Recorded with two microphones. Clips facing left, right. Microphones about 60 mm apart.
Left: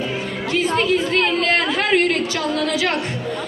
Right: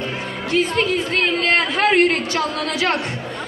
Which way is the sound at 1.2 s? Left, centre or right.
Right.